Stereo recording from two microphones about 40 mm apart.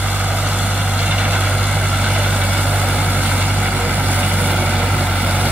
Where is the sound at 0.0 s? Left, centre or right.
Right.